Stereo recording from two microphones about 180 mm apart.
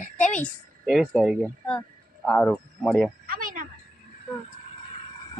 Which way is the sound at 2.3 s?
5° left (ahead or behind).